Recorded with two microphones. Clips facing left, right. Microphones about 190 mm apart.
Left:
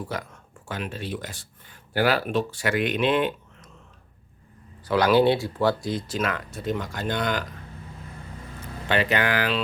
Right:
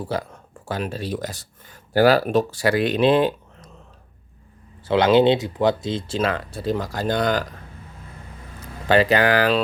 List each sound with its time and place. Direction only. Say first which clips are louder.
0.0 s speech: right 6 dB; 30° right (ahead or behind)
4.9 s speech: right 3 dB; 25° right (ahead or behind)
8.9 s speech: right 6 dB; 35° right (ahead or behind)